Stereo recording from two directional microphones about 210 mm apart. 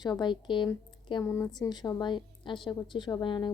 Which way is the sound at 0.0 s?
20° left (ahead or behind).